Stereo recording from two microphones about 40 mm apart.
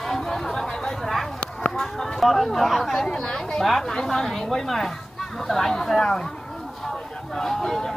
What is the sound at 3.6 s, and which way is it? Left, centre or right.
Speech, centre.